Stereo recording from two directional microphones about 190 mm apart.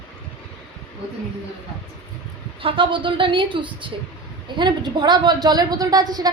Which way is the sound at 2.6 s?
25° right (ahead or behind).